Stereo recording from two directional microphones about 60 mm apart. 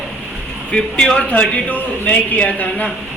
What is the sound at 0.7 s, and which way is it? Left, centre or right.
A man's voice, centre.